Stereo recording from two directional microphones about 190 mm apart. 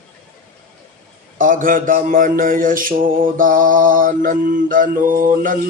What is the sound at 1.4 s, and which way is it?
Mantra, 45° right (ahead or behind).